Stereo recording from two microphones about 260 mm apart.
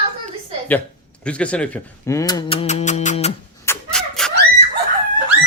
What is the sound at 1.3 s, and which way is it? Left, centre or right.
Speech, centre.